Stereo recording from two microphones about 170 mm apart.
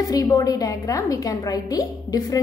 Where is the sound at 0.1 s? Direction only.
20° left (ahead or behind).